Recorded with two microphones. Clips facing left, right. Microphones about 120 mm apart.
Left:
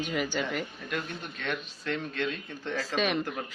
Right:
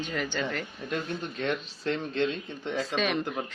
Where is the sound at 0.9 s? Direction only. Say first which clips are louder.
Right 5 dB; 30° right (ahead or behind).